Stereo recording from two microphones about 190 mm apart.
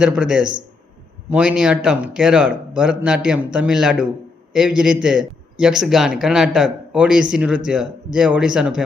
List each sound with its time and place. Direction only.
0.0 s a man's voice: 5° right (ahead or behind)